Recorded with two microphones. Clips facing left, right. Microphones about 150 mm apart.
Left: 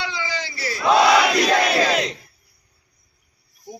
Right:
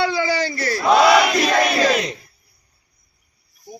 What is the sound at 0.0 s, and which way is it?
Crowd, 55° right (ahead or behind).